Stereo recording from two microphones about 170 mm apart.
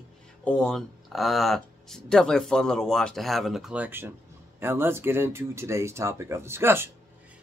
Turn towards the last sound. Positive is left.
turn(degrees=-15)  # may be behind; listen again after turning